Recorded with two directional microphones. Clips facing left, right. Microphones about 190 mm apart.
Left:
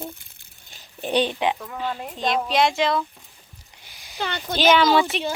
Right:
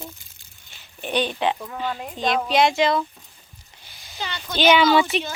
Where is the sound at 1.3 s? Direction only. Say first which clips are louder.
Even; 15° left (ahead or behind).